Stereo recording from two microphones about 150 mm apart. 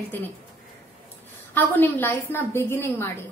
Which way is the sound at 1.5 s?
15° left (ahead or behind).